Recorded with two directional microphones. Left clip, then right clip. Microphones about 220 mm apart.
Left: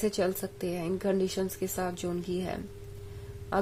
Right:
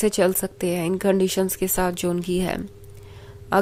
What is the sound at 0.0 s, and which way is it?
Speech, 35° right (ahead or behind).